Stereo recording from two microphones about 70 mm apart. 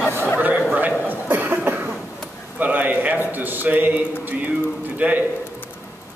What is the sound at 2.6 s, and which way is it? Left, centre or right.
A man's voice, right.